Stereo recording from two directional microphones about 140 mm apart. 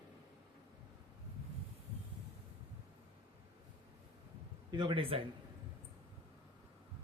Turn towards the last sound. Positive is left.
turn(degrees=-35)  # may be behind; listen again after turning